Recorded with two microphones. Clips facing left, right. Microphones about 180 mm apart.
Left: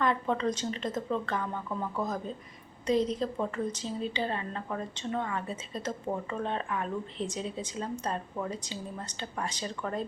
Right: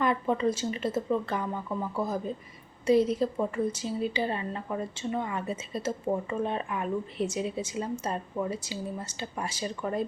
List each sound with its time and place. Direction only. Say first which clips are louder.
0.0 s a woman's voice: right 2 dB; 10° right (ahead or behind)